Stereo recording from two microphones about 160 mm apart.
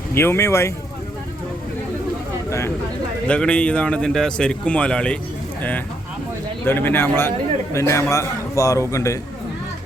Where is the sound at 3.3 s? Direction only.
5° left (ahead or behind).